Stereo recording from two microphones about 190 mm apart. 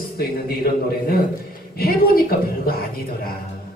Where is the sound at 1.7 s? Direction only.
55° left (ahead or behind).